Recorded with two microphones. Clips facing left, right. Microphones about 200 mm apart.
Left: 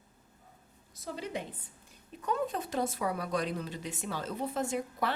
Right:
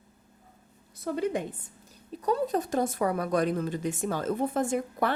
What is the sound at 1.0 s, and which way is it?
Speech, 55° right (ahead or behind).